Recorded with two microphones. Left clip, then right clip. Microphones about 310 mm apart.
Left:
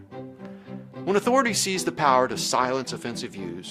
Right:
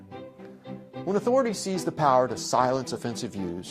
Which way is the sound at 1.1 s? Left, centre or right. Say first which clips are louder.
Left 2 dB; right.